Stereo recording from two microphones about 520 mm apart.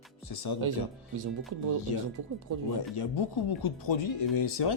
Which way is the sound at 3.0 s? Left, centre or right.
Left.